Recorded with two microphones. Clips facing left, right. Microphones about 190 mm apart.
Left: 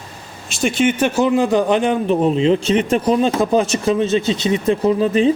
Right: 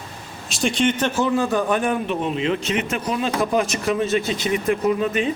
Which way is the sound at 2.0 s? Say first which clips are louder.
Left 8 dB; 35° left (ahead or behind).